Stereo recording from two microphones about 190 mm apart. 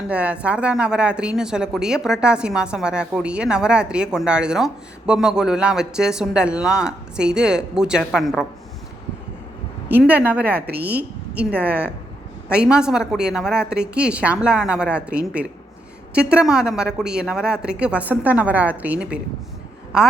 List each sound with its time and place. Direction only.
0.1 s speech: 5° right (ahead or behind)
9.9 s speech: 10° right (ahead or behind)
10.7 s speech: 55° right (ahead or behind)
10.9 s a woman's voice: 10° right (ahead or behind)